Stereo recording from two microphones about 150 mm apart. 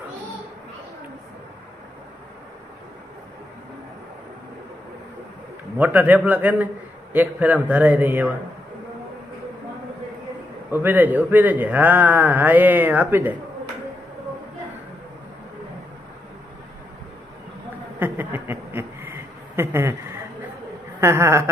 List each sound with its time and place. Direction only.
5.8 s a man's voice: 10° right (ahead or behind)
10.7 s a man's voice: 10° right (ahead or behind)
17.9 s a sound: 15° right (ahead or behind)
21.0 s a man's voice: 15° right (ahead or behind)